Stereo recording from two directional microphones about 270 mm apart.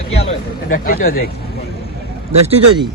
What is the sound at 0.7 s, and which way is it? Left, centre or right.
Speech, left.